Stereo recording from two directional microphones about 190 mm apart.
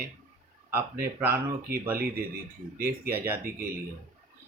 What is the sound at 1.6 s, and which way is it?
Speech, 50° right (ahead or behind).